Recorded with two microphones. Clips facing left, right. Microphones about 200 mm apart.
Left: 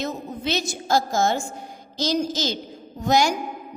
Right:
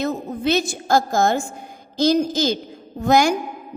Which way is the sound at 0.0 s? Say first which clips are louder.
Right 6 dB; 55° right (ahead or behind).